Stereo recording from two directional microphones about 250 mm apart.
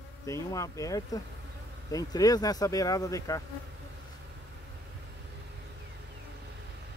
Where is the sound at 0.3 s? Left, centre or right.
Centre.